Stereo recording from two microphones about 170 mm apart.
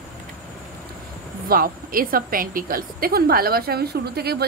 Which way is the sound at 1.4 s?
60° right (ahead or behind).